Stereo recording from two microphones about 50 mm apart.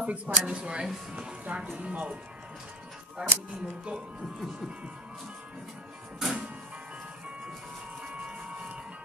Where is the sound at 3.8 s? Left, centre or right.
Right.